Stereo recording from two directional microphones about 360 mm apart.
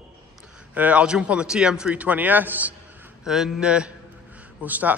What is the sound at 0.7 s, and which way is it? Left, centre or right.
A man's voice, centre.